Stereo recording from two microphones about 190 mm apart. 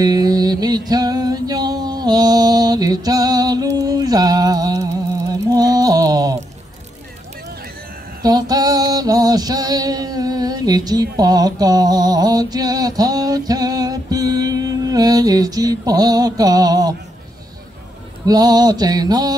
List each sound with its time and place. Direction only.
0.0 s music: 20° right (ahead or behind)
5.3 s a sound: 20° right (ahead or behind)
8.2 s female singing: 20° right (ahead or behind)
18.2 s mantra: 20° right (ahead or behind)